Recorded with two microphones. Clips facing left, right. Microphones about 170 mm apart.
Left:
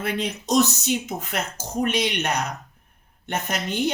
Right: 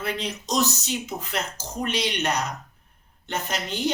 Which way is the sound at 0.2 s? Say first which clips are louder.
Left 7 dB; 50° left (ahead or behind).